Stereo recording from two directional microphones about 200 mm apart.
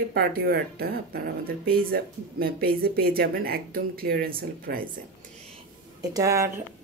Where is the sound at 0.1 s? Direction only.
50° right (ahead or behind).